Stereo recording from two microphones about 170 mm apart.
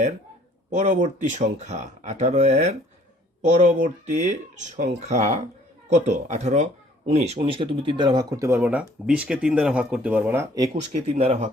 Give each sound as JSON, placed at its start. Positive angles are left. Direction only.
{"t": 0.7, "sound": "speech", "side_deg": -45}
{"t": 11.2, "sound": "speech", "side_deg": -40}